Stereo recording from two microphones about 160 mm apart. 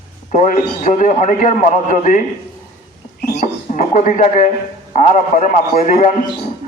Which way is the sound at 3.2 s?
65° left (ahead or behind).